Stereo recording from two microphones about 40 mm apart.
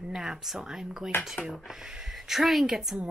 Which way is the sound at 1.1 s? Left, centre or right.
Left.